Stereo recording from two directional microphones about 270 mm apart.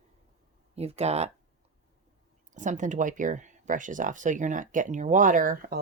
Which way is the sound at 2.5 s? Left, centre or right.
Right.